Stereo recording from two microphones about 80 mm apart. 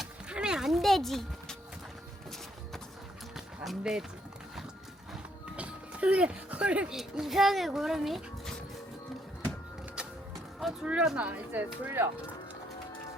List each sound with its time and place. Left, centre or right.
0.0 s a sound: centre
3.3 s music: centre
5.1 s music: centre
6.9 s speech: centre
10.8 s speech: centre
11.3 s speech: right